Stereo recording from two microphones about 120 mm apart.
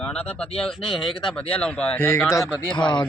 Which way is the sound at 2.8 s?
40° left (ahead or behind).